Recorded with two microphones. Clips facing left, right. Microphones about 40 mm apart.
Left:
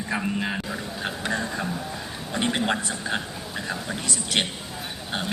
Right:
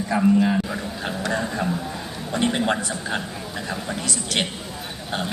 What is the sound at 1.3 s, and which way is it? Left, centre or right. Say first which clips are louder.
Speech: right 3 dB; centre.